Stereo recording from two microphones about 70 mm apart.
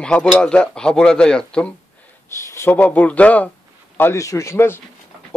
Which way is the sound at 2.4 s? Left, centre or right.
Left.